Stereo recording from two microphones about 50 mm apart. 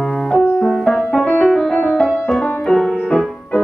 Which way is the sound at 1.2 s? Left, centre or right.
Left.